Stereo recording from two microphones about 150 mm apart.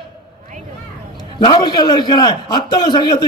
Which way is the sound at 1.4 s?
30° left (ahead or behind).